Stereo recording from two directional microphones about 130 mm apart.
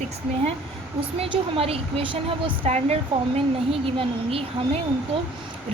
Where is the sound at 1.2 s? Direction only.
50° right (ahead or behind).